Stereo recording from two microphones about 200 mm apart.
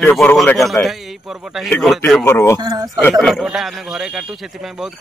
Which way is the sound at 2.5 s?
20° right (ahead or behind).